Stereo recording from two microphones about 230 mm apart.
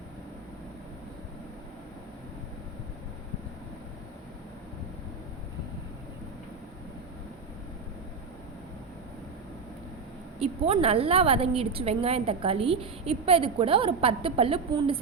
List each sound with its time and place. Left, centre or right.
10.4 s a woman's voice: right